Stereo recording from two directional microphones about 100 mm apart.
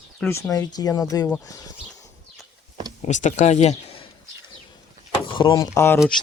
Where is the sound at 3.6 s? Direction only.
65° left (ahead or behind).